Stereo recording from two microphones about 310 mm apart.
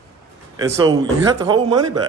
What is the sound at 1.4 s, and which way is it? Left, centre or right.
Speech, centre.